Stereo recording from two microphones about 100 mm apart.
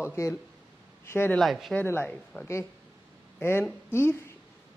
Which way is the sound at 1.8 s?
20° left (ahead or behind).